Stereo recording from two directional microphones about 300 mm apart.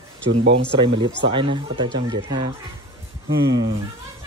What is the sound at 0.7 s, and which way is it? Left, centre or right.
Speech, centre.